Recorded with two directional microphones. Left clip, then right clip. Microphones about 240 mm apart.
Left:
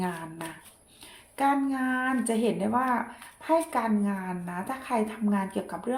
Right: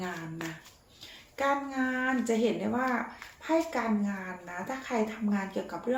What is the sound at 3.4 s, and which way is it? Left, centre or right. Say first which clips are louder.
Speech: left 3 dB; left.